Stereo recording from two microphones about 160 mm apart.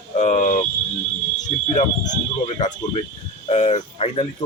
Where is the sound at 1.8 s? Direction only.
45° left (ahead or behind).